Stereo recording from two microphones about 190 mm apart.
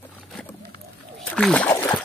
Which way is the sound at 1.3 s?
5° left (ahead or behind).